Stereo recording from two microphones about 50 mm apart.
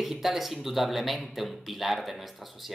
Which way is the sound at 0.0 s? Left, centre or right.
Centre.